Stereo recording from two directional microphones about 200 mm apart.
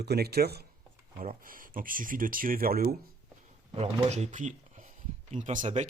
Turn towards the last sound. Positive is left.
turn(degrees=-35)  # may be behind; listen again after turning